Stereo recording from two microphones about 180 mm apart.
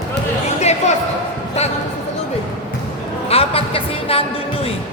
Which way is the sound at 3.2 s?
30° left (ahead or behind).